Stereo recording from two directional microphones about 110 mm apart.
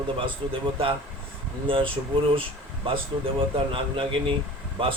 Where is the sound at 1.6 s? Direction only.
55° right (ahead or behind).